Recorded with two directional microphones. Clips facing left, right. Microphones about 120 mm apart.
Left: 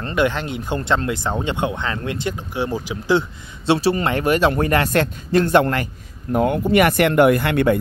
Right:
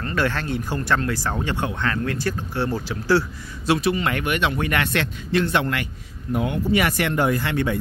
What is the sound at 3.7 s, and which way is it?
A man's voice, 30° left (ahead or behind).